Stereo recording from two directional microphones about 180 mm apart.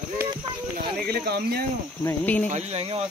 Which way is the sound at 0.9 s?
65° right (ahead or behind).